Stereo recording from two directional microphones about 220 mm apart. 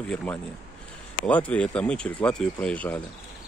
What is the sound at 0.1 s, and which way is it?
Speech, 5° left (ahead or behind).